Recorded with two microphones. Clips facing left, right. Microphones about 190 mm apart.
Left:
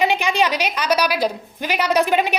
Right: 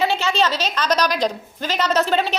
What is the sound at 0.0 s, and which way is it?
A woman's voice, 15° left (ahead or behind).